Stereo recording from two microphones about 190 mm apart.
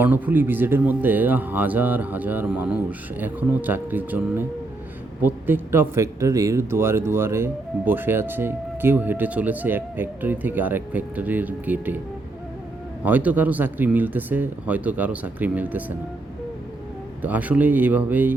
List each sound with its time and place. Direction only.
0.0 s speech: 10° right (ahead or behind)
13.1 s speech: 10° right (ahead or behind)
17.2 s speech: 10° right (ahead or behind)